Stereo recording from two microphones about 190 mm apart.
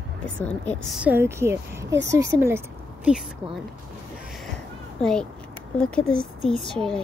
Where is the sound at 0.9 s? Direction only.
10° right (ahead or behind).